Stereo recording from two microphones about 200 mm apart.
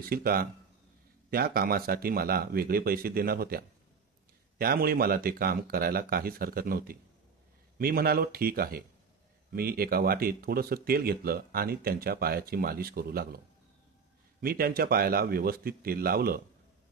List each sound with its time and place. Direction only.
0.0 s speech: 50° right (ahead or behind)
14.4 s speech: 50° right (ahead or behind)